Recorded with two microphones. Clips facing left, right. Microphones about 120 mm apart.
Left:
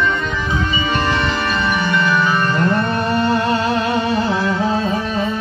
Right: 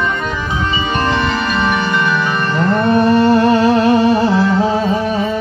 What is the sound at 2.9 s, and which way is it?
Music, 55° right (ahead or behind).